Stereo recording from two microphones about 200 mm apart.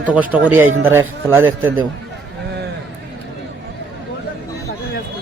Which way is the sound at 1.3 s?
10° right (ahead or behind).